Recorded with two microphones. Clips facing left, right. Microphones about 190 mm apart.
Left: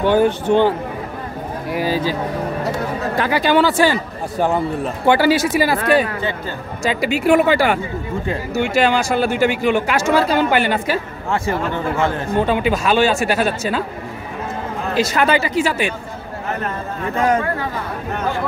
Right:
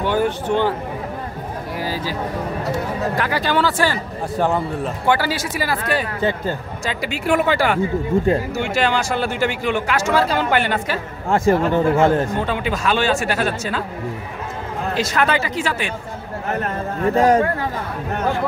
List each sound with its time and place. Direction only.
0.0 s speech: 20° left (ahead or behind)
3.2 s speech: 15° left (ahead or behind)
5.0 s speech: 25° left (ahead or behind)
6.8 s speech: 10° left (ahead or behind)
11.2 s speech: 45° right (ahead or behind)
12.4 s speech: 15° left (ahead or behind)
15.0 s speech: 5° left (ahead or behind)
17.0 s speech: 35° right (ahead or behind)